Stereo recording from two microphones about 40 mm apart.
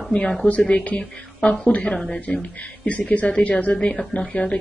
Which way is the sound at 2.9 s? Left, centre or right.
Left.